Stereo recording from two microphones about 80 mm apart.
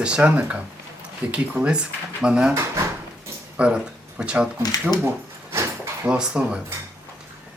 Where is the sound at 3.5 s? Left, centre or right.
Centre.